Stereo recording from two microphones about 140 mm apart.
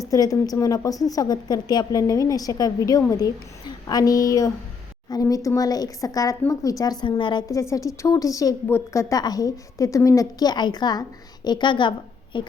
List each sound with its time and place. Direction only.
0.0 s a woman's voice: 25° left (ahead or behind)
7.4 s a woman's voice: 20° left (ahead or behind)